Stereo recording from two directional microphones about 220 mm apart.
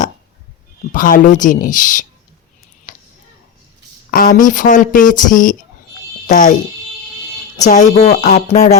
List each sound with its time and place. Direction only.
0.9 s speech: 40° left (ahead or behind)
2.9 s a sound: 40° left (ahead or behind)
4.1 s speech: 40° left (ahead or behind)
7.6 s speech: 35° left (ahead or behind)